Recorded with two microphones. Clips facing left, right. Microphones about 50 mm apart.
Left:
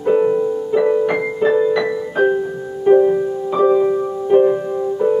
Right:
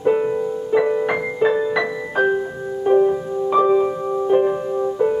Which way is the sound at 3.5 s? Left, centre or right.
Centre.